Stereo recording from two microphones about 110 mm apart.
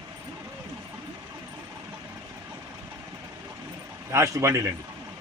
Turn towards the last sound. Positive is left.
turn(degrees=-25)  # may be behind; listen again after turning